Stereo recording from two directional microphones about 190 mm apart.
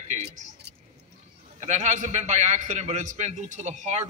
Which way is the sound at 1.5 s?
40° right (ahead or behind).